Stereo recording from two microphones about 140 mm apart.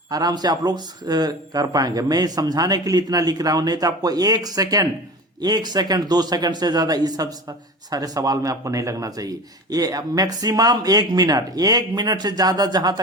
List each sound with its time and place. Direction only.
0.1 s a man's voice: 30° right (ahead or behind)